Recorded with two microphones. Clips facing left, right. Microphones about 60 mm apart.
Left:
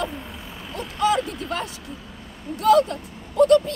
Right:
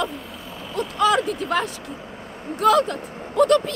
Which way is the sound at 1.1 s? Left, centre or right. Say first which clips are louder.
Right 4 dB; right.